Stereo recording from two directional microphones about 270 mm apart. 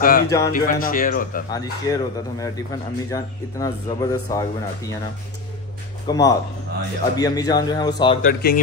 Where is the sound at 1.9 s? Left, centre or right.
Centre.